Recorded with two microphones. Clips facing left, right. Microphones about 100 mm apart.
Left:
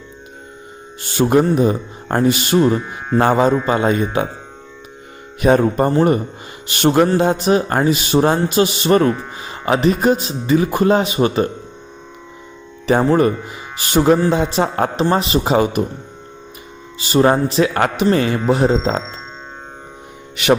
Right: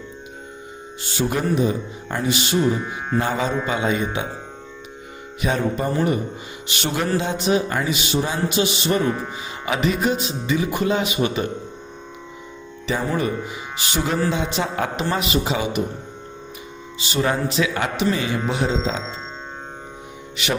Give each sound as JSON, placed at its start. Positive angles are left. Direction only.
{"t": 1.0, "sound": "speech", "side_deg": 55}
{"t": 5.4, "sound": "speech", "side_deg": 50}
{"t": 9.6, "sound": "speech", "side_deg": 40}
{"t": 13.1, "sound": "speech", "side_deg": 45}
{"t": 15.4, "sound": "speech", "side_deg": 45}
{"t": 17.0, "sound": "speech", "side_deg": 45}
{"t": 20.3, "sound": "speech", "side_deg": 55}